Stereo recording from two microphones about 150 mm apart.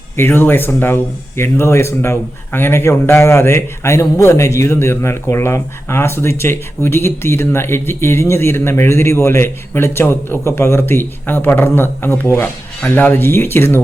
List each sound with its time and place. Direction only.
0.2 s a man's voice: 15° left (ahead or behind)